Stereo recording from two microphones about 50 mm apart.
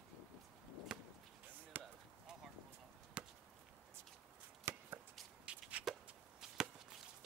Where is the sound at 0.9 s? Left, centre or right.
Centre.